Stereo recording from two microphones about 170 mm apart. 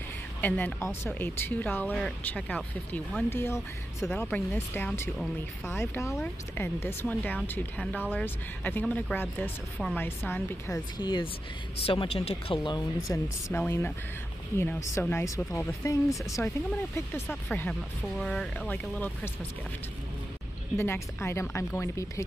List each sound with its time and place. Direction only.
0.4 s speech: 10° left (ahead or behind)
11.0 s speech: 25° left (ahead or behind)
13.5 s speech: 15° left (ahead or behind)
20.7 s speech: 15° left (ahead or behind)